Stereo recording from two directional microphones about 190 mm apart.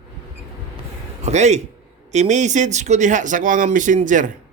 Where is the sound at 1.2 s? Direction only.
35° right (ahead or behind).